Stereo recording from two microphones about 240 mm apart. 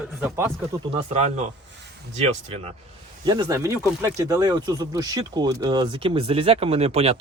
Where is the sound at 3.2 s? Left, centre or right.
Centre.